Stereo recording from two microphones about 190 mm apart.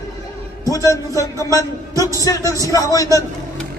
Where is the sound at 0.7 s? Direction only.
20° left (ahead or behind).